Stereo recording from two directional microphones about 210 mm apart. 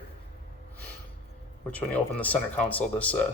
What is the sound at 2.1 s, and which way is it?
Speech, 5° left (ahead or behind).